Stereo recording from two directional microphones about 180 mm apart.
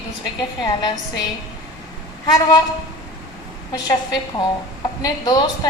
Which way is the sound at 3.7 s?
20° left (ahead or behind).